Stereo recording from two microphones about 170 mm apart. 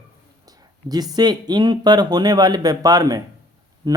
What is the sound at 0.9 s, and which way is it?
Speech, 20° right (ahead or behind).